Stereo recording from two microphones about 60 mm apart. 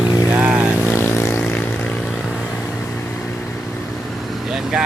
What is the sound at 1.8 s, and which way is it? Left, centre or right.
Vehicle, left.